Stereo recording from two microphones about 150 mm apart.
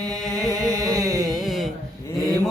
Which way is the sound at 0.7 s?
25° right (ahead or behind).